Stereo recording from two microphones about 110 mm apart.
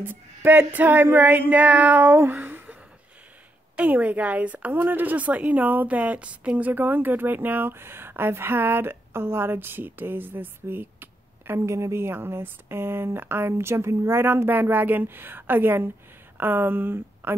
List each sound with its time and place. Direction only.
0.0 s female singing: 20° right (ahead or behind)
2.4 s gasp: 20° right (ahead or behind)
3.7 s a woman's voice: 15° right (ahead or behind)